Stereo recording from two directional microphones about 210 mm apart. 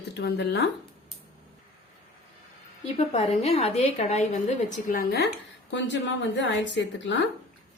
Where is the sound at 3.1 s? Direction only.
30° left (ahead or behind).